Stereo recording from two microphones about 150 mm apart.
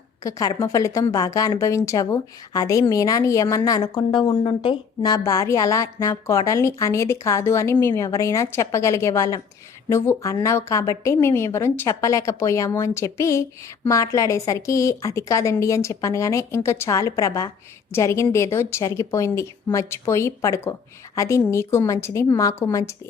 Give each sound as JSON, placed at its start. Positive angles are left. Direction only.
{"t": 0.2, "sound": "speech", "side_deg": 25}